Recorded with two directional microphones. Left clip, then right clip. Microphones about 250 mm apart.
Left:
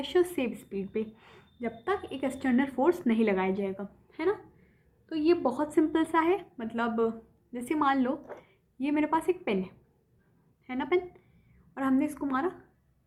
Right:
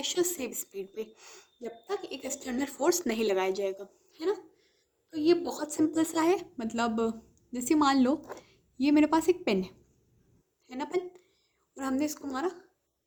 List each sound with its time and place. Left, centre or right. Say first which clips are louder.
0.0 s a woman's voice: left 3 dB; right
5.1 s a woman's voice: left 1 dB; right
11.7 s a woman's voice: left 3 dB; right